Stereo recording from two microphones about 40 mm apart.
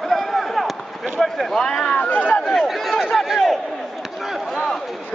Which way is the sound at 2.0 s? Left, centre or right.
Left.